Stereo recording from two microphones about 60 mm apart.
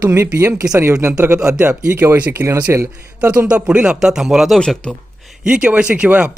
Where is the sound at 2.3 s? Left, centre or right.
Right.